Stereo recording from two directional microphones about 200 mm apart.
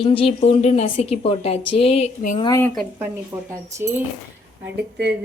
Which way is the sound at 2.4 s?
15° left (ahead or behind).